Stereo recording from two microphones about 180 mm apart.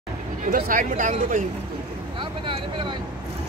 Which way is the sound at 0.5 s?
50° right (ahead or behind).